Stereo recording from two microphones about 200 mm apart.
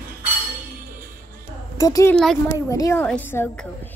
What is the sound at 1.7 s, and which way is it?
Speech, 15° left (ahead or behind).